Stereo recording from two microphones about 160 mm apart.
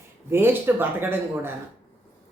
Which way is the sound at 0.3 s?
15° right (ahead or behind).